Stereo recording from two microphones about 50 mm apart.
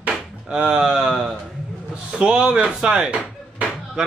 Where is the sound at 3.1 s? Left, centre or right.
Right.